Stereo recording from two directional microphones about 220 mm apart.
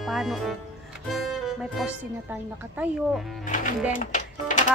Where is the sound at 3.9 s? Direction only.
35° left (ahead or behind).